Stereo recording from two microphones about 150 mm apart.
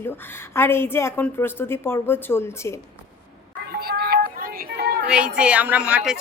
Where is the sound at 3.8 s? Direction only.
90° right.